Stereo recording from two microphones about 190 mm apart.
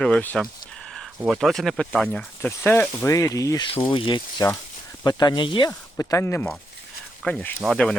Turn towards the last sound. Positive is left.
turn(degrees=0)  # may be behind; listen again after turning